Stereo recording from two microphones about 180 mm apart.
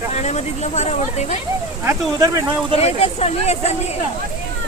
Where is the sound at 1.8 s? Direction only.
15° right (ahead or behind).